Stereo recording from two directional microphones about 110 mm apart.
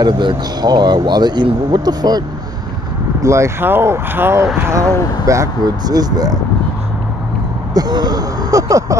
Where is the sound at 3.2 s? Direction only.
25° right (ahead or behind).